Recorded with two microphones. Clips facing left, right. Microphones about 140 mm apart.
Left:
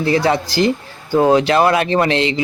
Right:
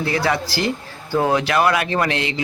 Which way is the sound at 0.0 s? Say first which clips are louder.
Left 5 dB; 25° left (ahead or behind).